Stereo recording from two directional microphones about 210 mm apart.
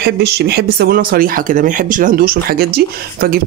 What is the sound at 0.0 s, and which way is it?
Speech, 50° right (ahead or behind).